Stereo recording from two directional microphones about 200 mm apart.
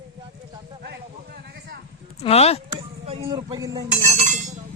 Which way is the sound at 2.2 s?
30° left (ahead or behind).